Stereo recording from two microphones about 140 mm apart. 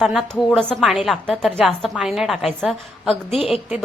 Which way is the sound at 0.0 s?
Centre (ahead or behind).